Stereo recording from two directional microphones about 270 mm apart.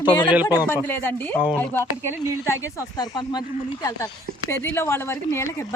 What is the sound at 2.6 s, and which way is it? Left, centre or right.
Speech, centre.